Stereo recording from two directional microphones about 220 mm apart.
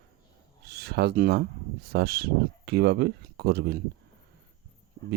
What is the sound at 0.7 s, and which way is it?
Speech, 45° right (ahead or behind).